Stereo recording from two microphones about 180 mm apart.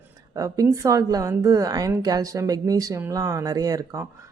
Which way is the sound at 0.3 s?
20° right (ahead or behind).